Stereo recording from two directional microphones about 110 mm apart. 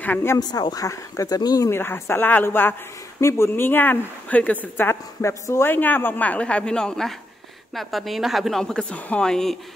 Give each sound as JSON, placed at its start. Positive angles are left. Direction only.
{"t": 0.0, "sound": "speech", "side_deg": 20}
{"t": 0.4, "sound": "speech", "side_deg": 40}
{"t": 1.7, "sound": "a woman's voice", "side_deg": 20}